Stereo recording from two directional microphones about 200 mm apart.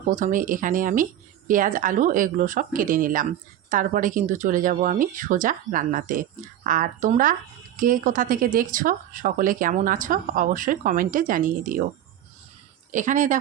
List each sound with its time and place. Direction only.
0.2 s speech: 40° right (ahead or behind)
12.9 s speech: 40° right (ahead or behind)